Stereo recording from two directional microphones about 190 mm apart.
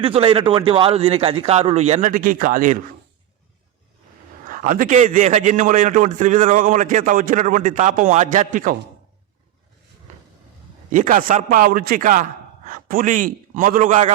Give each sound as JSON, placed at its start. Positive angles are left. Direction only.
{"t": 0.0, "sound": "a man's voice", "side_deg": -30}
{"t": 4.4, "sound": "a man's voice", "side_deg": -45}
{"t": 10.9, "sound": "speech", "side_deg": -45}